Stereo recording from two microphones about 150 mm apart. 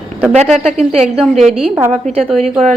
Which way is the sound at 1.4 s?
40° right (ahead or behind).